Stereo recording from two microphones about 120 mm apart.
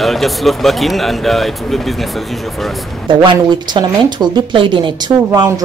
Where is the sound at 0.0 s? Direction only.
Centre (ahead or behind).